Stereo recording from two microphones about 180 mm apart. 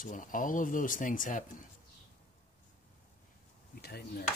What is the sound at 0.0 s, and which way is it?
Speech, 50° left (ahead or behind).